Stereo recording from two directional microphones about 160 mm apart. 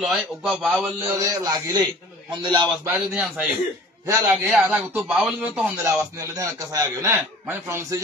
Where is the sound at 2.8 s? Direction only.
10° right (ahead or behind).